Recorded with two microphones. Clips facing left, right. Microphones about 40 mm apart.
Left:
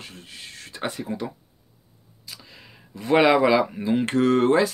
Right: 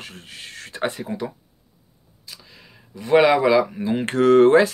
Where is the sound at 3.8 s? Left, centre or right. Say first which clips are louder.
Even; centre.